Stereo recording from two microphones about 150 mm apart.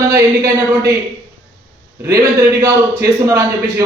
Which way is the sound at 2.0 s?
20° right (ahead or behind).